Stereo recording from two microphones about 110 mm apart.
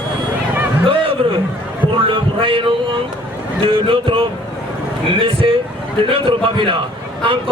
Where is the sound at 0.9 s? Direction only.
55° right (ahead or behind).